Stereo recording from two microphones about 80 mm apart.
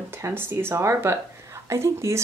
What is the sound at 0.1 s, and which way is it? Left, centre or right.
A woman's voice, right.